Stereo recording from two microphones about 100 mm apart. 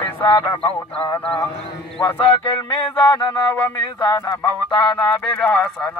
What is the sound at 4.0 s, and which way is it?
Speech, 45° left (ahead or behind).